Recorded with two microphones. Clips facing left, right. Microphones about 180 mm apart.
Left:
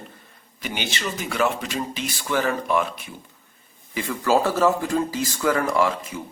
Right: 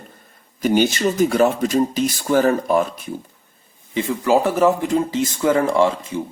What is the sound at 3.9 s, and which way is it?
Speech, 20° right (ahead or behind).